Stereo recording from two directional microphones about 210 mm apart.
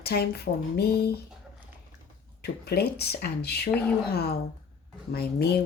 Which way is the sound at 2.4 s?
50° left (ahead or behind).